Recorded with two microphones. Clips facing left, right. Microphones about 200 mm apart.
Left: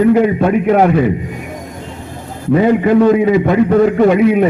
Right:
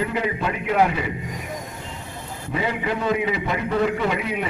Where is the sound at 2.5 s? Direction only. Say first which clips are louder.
Left 15 dB; 50° left (ahead or behind).